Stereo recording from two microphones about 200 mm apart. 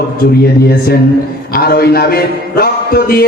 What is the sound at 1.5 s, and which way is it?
A man's voice, 50° left (ahead or behind).